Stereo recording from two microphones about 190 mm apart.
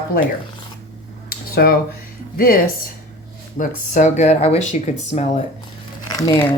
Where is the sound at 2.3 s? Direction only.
50° left (ahead or behind).